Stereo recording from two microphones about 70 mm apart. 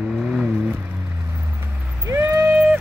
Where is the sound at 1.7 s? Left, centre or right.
Right.